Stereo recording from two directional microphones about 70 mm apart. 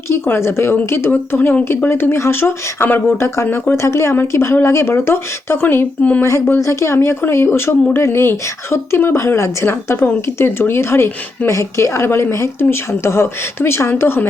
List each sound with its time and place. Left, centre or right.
0.1 s speech: left
3.4 s speech: left
3.8 s speech: left
6.6 s speech: left